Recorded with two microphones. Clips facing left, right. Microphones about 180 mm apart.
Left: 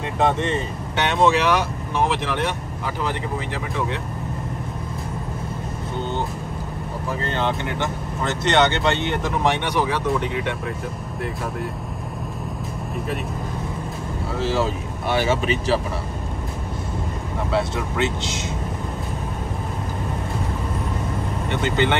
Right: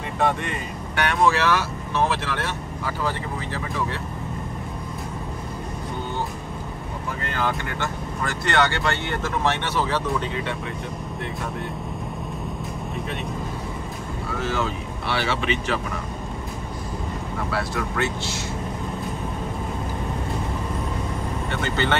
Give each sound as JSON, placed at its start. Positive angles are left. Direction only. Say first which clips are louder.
{"t": 0.2, "sound": "speech", "louder": "left 3 dB", "side_deg": 20}
{"t": 7.2, "sound": "speech", "louder": "left 2 dB", "side_deg": 25}
{"t": 14.3, "sound": "speech", "louder": "left 4 dB", "side_deg": 30}
{"t": 15.0, "sound": "speech", "louder": "left 4 dB", "side_deg": 45}
{"t": 17.5, "sound": "speech", "louder": "left 5 dB", "side_deg": 20}
{"t": 21.5, "sound": "speech", "louder": "left 5 dB", "side_deg": 20}